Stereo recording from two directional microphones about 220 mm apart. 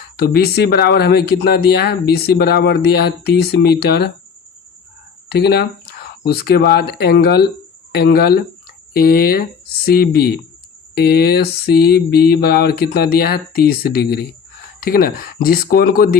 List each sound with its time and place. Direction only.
0.2 s speech: 45° left (ahead or behind)
5.3 s speech: 45° left (ahead or behind)